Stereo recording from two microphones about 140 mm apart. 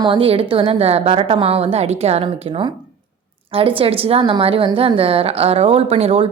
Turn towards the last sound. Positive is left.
turn(degrees=-45)  # may be behind; listen again after turning